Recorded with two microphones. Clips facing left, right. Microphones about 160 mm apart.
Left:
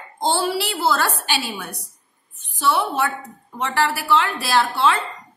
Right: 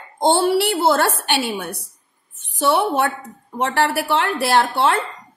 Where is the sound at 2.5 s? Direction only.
60° right (ahead or behind).